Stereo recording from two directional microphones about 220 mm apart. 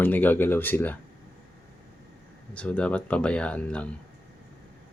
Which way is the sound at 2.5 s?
5° left (ahead or behind).